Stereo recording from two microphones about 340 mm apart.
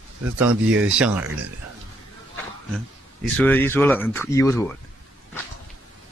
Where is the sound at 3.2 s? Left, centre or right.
Centre.